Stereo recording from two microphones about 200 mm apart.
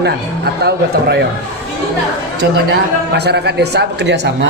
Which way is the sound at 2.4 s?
55° right (ahead or behind).